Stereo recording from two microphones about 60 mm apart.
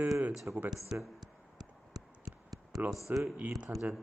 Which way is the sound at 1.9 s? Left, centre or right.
Right.